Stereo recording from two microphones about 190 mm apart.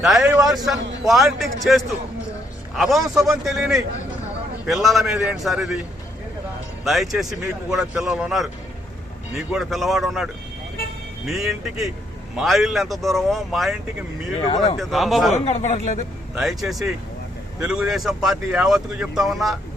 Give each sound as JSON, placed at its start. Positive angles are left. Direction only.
{"t": 0.0, "sound": "speech", "side_deg": 0}
{"t": 6.8, "sound": "speech", "side_deg": 0}
{"t": 9.5, "sound": "speech", "side_deg": 0}
{"t": 11.3, "sound": "speech", "side_deg": 0}
{"t": 14.8, "sound": "speech", "side_deg": 0}
{"t": 15.3, "sound": "speech", "side_deg": 35}
{"t": 16.3, "sound": "speech", "side_deg": 0}